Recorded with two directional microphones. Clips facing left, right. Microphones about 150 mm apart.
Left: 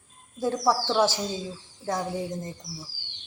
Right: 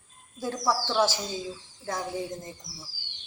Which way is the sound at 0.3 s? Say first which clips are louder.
Left 4 dB; 25° left (ahead or behind).